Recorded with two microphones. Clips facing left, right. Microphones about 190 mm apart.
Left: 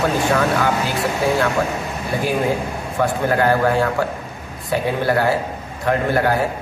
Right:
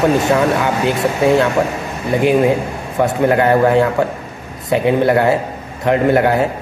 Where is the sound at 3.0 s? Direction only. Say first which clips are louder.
Right 5 dB; 20° right (ahead or behind).